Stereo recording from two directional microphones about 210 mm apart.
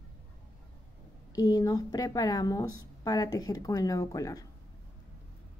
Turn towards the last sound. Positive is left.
turn(degrees=15)  # may be behind; listen again after turning